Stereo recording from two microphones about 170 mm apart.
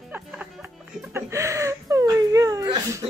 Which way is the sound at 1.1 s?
15° right (ahead or behind).